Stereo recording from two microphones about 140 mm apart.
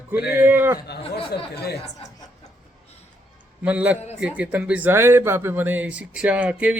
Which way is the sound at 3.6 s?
10° right (ahead or behind).